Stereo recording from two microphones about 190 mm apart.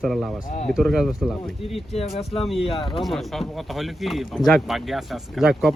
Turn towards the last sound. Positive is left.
turn(degrees=0)  # may be behind; listen again after turning